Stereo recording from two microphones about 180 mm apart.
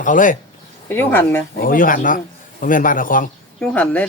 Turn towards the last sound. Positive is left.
turn(degrees=10)  # may be behind; listen again after turning